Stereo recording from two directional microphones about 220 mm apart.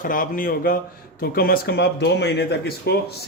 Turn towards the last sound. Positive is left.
turn(degrees=45)  # may be behind; listen again after turning